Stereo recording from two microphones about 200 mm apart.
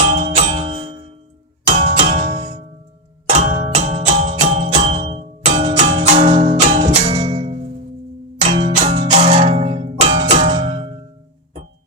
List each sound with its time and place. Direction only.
0.1 s music: 30° right (ahead or behind)